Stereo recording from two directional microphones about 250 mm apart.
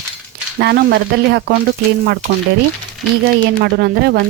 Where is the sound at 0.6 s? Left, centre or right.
Right.